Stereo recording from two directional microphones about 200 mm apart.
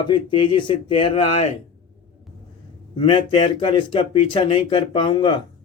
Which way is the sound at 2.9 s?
30° left (ahead or behind).